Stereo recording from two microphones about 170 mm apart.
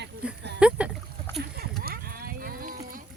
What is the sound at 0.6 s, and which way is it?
Rowboat, 5° right (ahead or behind).